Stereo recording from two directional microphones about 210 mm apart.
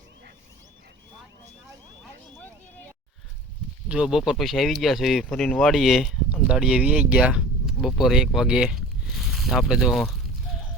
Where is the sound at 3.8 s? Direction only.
5° right (ahead or behind).